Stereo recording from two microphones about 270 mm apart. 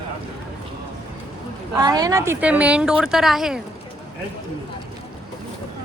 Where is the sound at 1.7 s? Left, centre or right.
Centre.